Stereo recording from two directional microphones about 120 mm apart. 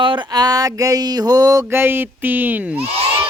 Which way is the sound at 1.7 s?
20° right (ahead or behind).